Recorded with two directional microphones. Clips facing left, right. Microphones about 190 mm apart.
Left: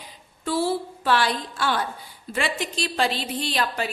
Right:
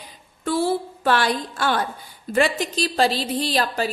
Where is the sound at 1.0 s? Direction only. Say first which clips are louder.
Right 2 dB; 50° right (ahead or behind).